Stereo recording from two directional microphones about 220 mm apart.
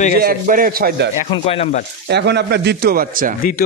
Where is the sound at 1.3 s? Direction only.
25° left (ahead or behind).